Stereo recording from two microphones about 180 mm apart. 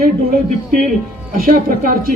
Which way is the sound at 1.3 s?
50° right (ahead or behind).